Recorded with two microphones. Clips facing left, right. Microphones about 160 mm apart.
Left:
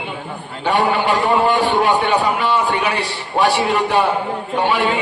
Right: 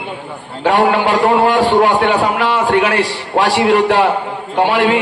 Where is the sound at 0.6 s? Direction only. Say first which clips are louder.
Right 4 dB; 90° right.